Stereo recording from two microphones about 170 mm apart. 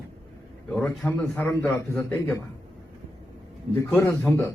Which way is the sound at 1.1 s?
10° left (ahead or behind).